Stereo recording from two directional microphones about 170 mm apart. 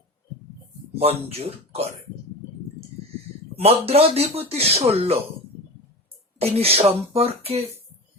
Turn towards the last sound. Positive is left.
turn(degrees=-35)  # may be behind; listen again after turning